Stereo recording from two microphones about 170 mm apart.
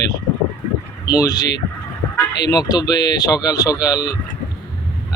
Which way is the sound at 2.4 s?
25° left (ahead or behind).